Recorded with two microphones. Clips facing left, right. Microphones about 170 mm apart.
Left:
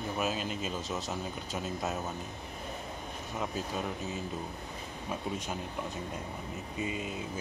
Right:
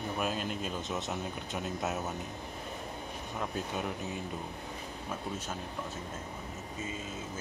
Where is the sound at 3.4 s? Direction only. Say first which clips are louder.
Left 1 dB; centre (ahead or behind).